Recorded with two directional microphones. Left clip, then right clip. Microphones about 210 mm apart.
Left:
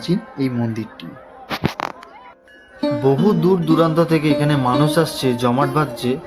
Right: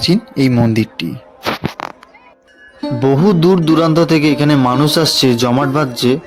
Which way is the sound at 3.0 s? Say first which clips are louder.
Right 5 dB; 35° right (ahead or behind).